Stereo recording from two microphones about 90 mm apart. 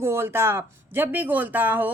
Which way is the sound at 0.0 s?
30° right (ahead or behind).